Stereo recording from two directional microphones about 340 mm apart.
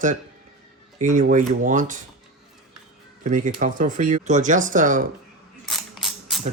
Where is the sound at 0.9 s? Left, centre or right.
Right.